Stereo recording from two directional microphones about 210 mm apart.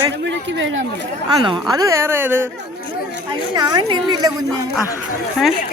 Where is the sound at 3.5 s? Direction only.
20° right (ahead or behind).